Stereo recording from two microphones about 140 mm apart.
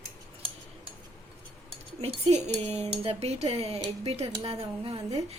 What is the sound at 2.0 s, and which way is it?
Speech, 45° right (ahead or behind).